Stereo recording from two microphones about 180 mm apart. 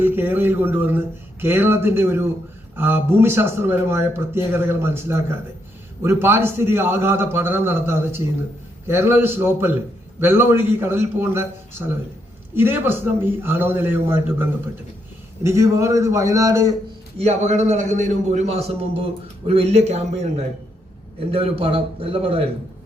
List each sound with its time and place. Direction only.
0.0 s speech: 10° right (ahead or behind)
17.2 s a man's voice: 40° right (ahead or behind)